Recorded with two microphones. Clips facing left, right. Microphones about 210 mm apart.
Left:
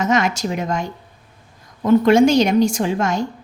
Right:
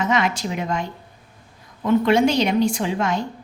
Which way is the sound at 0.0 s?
45° left (ahead or behind).